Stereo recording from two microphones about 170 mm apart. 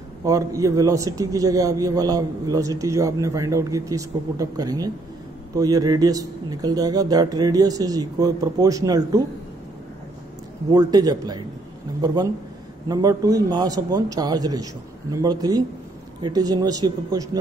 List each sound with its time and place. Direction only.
0.2 s a man's voice: 20° right (ahead or behind)
10.7 s a man's voice: 25° right (ahead or behind)